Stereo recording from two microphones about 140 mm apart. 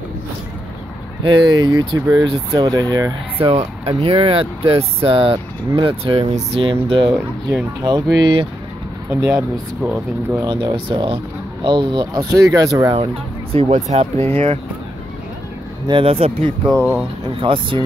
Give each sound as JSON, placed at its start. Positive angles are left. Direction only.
{"t": 1.2, "sound": "speech", "side_deg": -35}
{"t": 3.4, "sound": "speech", "side_deg": -45}
{"t": 9.1, "sound": "speech", "side_deg": -15}
{"t": 10.4, "sound": "speech", "side_deg": -35}
{"t": 12.9, "sound": "speech", "side_deg": -45}
{"t": 15.9, "sound": "speech", "side_deg": -45}
{"t": 16.7, "sound": "speech", "side_deg": -15}
{"t": 17.4, "sound": "speech", "side_deg": -40}